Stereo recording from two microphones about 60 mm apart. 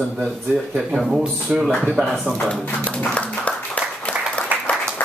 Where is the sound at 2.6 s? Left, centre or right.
Left.